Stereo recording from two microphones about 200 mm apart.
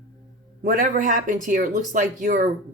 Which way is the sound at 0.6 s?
45° right (ahead or behind).